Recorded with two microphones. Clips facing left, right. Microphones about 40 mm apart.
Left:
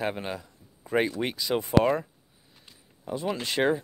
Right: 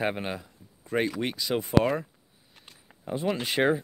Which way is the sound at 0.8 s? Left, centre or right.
Centre.